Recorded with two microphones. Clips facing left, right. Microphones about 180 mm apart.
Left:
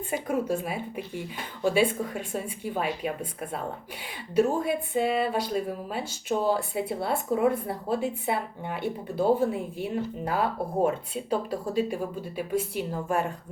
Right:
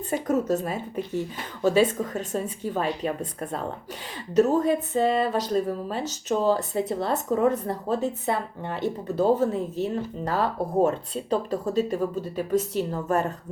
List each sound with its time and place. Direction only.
0.1 s speech: 10° left (ahead or behind)
1.7 s speech: 45° right (ahead or behind)
2.1 s speech: 10° left (ahead or behind)
4.4 s speech: 10° left (ahead or behind)